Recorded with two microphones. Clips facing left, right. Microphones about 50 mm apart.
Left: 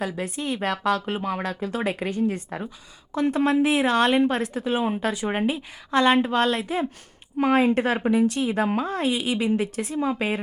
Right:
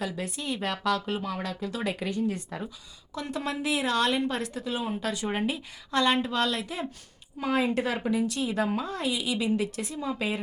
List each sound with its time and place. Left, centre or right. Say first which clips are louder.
0.0 s speech: left 5 dB; left